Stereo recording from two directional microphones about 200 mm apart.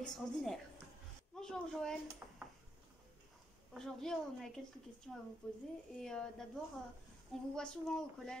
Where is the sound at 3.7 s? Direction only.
Centre (ahead or behind).